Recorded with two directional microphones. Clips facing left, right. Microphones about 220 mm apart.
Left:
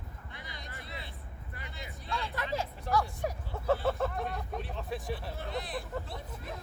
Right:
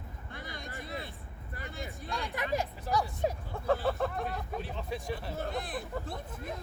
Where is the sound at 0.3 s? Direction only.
50° right (ahead or behind).